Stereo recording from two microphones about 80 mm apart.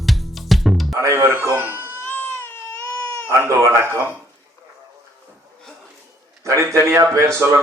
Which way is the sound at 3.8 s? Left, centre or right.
Right.